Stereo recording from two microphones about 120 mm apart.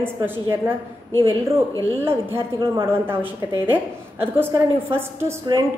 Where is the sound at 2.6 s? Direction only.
30° right (ahead or behind).